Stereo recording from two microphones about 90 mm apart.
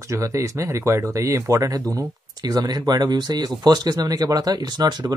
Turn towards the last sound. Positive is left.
turn(degrees=-45)  # may be behind; listen again after turning